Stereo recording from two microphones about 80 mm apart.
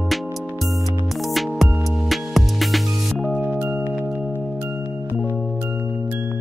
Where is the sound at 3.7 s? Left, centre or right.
Right.